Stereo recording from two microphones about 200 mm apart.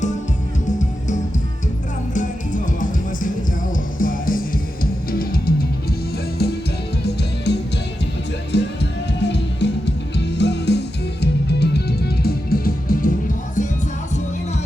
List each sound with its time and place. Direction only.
0.8 s music: 40° left (ahead or behind)